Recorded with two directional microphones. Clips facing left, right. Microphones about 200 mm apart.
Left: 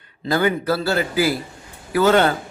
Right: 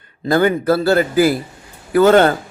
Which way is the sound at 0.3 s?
50° right (ahead or behind).